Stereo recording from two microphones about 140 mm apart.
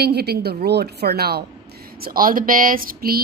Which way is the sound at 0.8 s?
90° right.